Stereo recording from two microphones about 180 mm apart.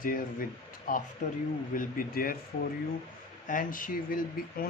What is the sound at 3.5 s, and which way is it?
Speech, 50° left (ahead or behind).